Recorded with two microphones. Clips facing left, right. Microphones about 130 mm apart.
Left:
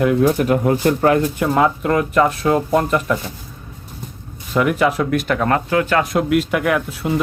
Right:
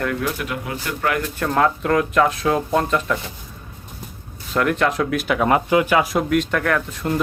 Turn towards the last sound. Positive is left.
turn(degrees=5)  # may be behind; listen again after turning